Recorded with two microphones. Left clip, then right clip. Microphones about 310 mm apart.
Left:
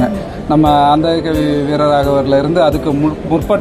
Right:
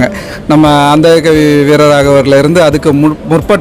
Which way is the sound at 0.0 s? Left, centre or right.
Right.